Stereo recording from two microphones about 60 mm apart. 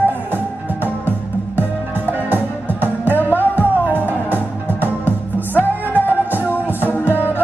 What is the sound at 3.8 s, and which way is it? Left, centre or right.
Music, right.